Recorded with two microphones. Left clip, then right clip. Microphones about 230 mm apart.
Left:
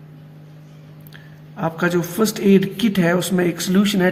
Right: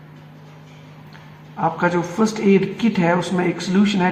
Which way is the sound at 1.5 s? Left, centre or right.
Left.